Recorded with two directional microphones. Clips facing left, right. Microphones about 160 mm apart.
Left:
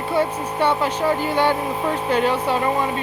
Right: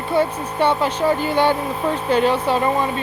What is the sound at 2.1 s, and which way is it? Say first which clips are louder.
Speech: right 3 dB; 30° right (ahead or behind).